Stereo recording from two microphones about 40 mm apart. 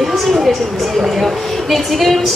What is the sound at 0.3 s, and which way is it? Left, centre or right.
A woman's voice, centre.